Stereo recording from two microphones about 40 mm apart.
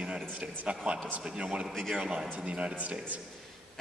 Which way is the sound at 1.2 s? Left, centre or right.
Right.